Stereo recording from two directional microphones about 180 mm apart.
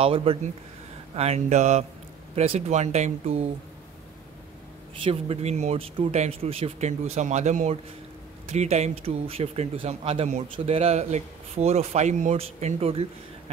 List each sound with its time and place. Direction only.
0.0 s speech: 30° right (ahead or behind)
5.0 s speech: 35° right (ahead or behind)